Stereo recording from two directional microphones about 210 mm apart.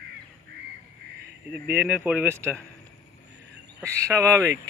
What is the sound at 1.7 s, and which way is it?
Speech, 5° right (ahead or behind).